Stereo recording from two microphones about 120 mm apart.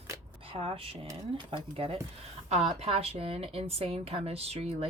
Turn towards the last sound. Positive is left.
turn(degrees=-55)  # may be behind; listen again after turning